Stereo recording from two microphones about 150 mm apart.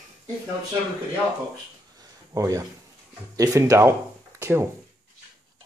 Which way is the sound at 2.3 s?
25° right (ahead or behind).